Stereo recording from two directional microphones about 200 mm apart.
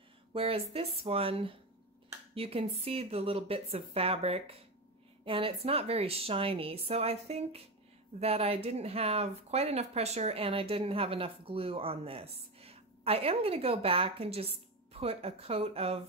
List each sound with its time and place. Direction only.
0.3 s speech: 30° right (ahead or behind)